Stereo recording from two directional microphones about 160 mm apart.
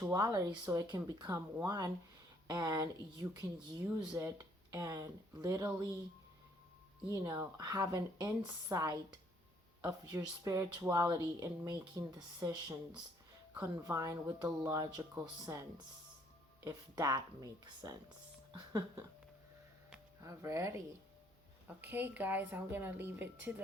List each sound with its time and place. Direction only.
0.0 s speech: 20° right (ahead or behind)
7.5 s speech: 25° right (ahead or behind)
16.6 s speech: 25° right (ahead or behind)
20.2 s a woman's voice: 20° right (ahead or behind)